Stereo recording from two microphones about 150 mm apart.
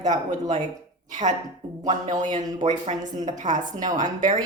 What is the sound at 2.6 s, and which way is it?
Speech, 55° right (ahead or behind).